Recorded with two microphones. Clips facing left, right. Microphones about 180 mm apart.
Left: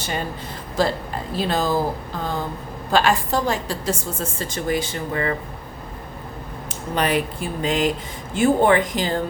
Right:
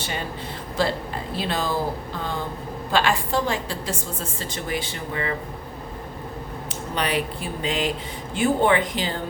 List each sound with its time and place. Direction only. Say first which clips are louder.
0.0 s speech: left 3 dB; 45° left (ahead or behind)
2.9 s a woman's voice: left 3 dB; 45° left (ahead or behind)
6.7 s a sound: left 4 dB; 45° left (ahead or behind)
7.6 s a woman's voice: left 4 dB; 45° left (ahead or behind)